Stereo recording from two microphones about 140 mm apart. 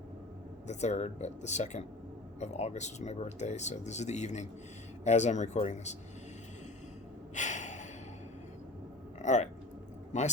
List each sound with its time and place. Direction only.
0.7 s speech: 55° left (ahead or behind)
7.3 s gasp: 60° left (ahead or behind)
9.2 s a sound: 60° left (ahead or behind)